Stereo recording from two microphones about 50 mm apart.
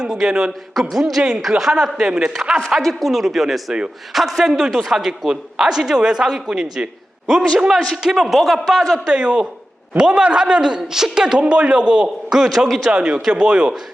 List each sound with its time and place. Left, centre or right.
0.0 s a man's voice: centre
0.7 s a man's voice: centre
2.3 s a man's voice: centre
9.0 s a man's voice: right; by 12.9 s centre
12.9 s speech: right